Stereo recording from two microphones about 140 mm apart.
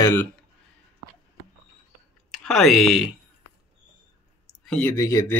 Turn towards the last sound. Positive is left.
turn(degrees=20)  # may be behind; listen again after turning